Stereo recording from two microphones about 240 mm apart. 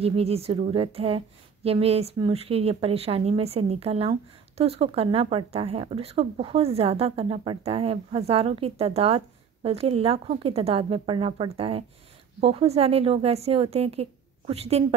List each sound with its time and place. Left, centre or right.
0.0 s a woman's voice: right